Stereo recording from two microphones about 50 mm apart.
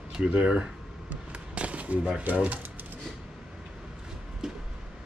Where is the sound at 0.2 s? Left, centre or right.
Right.